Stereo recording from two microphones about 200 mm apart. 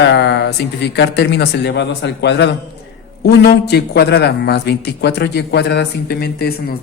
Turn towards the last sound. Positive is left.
turn(degrees=55)  # may be behind; listen again after turning